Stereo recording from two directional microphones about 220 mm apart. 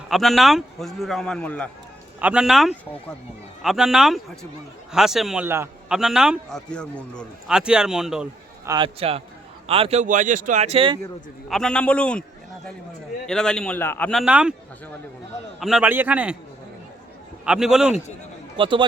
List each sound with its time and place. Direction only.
0.1 s a man's voice: centre (ahead or behind)
2.1 s a man's voice: 5° right (ahead or behind)
8.7 s a man's voice: 25° right (ahead or behind)
11.4 s a man's voice: centre (ahead or behind)
13.2 s a man's voice: 5° left (ahead or behind)
15.6 s a man's voice: 5° right (ahead or behind)
17.4 s a man's voice: 5° right (ahead or behind)
18.5 s a man's voice: 20° right (ahead or behind)